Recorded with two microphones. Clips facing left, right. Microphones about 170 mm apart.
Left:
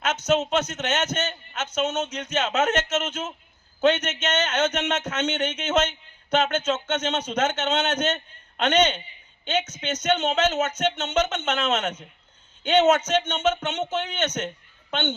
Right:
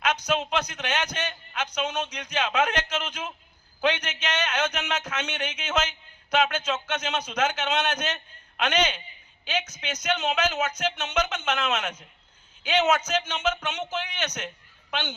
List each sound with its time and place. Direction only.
0.3 s speech: 25° left (ahead or behind)